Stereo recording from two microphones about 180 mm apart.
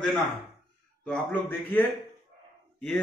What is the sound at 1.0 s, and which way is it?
Speech, 10° left (ahead or behind).